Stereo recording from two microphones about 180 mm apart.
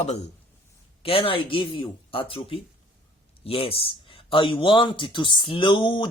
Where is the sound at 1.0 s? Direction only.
30° left (ahead or behind).